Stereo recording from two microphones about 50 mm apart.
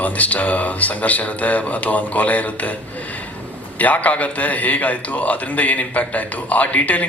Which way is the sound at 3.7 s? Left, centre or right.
Left.